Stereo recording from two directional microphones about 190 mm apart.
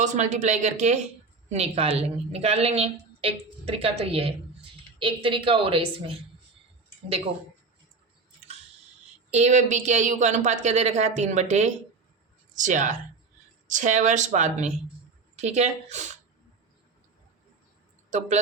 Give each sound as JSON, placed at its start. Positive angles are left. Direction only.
{"t": 0.0, "sound": "a woman's voice", "side_deg": -40}
{"t": 9.3, "sound": "a woman's voice", "side_deg": -40}